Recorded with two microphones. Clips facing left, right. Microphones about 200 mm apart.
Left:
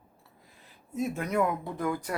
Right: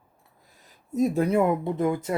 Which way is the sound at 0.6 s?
40° right (ahead or behind).